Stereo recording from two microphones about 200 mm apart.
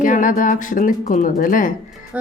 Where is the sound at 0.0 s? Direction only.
40° left (ahead or behind).